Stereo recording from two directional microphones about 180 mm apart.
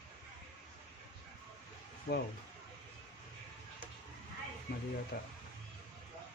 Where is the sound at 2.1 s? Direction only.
60° left (ahead or behind).